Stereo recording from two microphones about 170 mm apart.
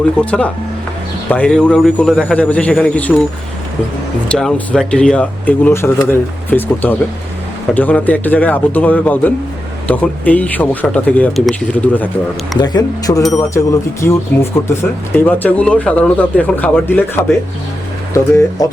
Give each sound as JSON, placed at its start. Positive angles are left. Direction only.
{"t": 0.3, "sound": "speech", "side_deg": 5}
{"t": 4.3, "sound": "speech", "side_deg": 5}
{"t": 12.5, "sound": "speech", "side_deg": 25}